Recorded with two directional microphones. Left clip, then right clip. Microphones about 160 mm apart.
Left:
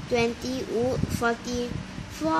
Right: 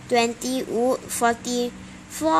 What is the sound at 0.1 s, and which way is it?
Speech, 90° right.